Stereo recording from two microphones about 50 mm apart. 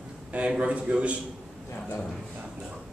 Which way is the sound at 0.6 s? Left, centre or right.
Right.